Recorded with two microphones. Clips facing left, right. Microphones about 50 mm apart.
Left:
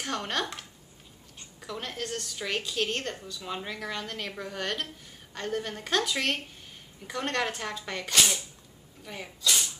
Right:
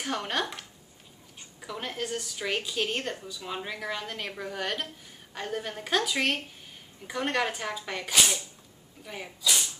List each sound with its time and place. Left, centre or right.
0.0 s a woman's voice: centre